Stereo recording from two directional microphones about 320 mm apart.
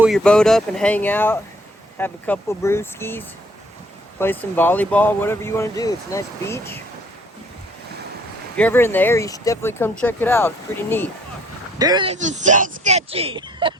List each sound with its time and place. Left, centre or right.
0.0 s speech: centre
8.5 s speech: centre
11.8 s speech: centre